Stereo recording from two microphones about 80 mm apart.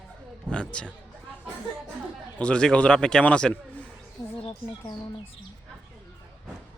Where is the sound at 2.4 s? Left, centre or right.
Centre.